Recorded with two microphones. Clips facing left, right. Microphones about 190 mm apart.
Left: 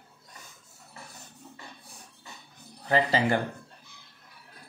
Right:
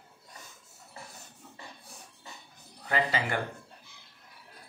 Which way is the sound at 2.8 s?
30° left (ahead or behind).